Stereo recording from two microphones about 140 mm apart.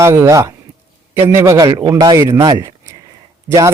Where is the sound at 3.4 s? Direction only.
20° right (ahead or behind).